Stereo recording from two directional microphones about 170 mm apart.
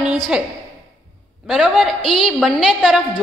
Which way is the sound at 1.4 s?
Centre (ahead or behind).